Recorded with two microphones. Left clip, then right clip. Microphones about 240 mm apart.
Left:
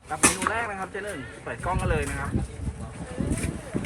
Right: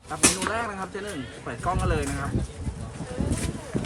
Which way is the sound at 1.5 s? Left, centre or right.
Centre.